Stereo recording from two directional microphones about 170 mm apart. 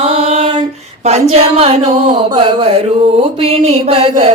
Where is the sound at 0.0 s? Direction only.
35° right (ahead or behind).